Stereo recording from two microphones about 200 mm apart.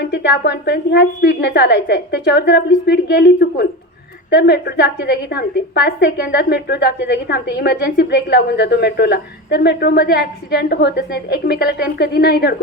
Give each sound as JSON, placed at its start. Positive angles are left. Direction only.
{"t": 0.0, "sound": "a woman's voice", "side_deg": 60}